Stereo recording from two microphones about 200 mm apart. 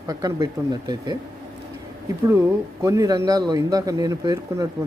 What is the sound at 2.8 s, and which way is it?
Speech, 15° right (ahead or behind).